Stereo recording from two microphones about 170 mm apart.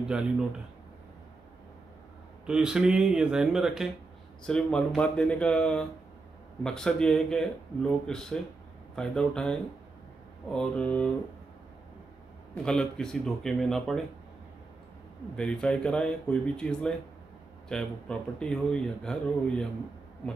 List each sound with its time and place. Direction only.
2.4 s speech: 5° right (ahead or behind)
12.6 s speech: 5° left (ahead or behind)
15.3 s speech: 5° left (ahead or behind)